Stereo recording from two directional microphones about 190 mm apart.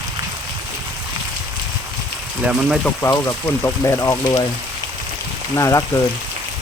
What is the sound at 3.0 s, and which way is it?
Speech, 15° left (ahead or behind).